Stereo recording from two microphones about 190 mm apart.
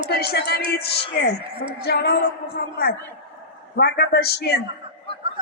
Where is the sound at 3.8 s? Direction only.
55° left (ahead or behind).